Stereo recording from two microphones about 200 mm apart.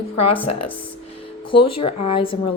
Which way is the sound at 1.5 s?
30° left (ahead or behind).